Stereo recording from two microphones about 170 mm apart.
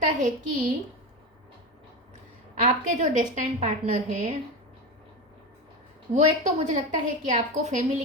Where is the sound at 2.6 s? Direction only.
45° right (ahead or behind).